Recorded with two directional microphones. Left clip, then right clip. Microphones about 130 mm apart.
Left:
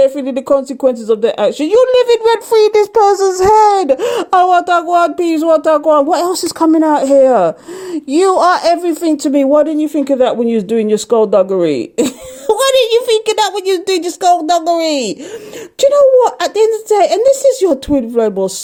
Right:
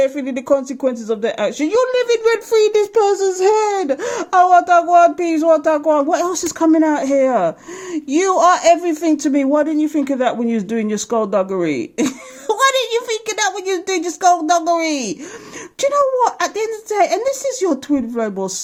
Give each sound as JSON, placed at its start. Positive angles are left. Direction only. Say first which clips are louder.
{"t": 0.0, "sound": "speech", "louder": "left 6 dB", "side_deg": 30}